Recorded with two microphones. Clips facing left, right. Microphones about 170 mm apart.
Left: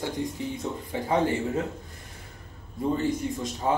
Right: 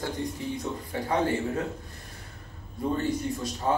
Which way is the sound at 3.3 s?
15° left (ahead or behind).